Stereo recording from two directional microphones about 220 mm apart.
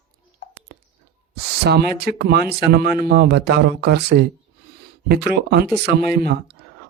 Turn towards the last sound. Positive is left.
turn(degrees=-45)  # may be behind; listen again after turning